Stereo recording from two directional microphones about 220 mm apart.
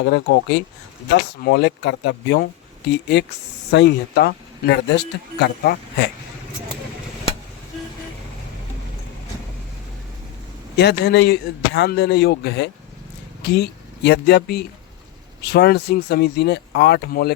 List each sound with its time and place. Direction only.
0.0 s speech: 50° left (ahead or behind)
10.8 s speech: 45° left (ahead or behind)